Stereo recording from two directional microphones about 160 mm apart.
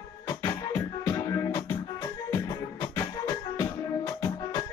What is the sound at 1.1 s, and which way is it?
Music, 20° left (ahead or behind).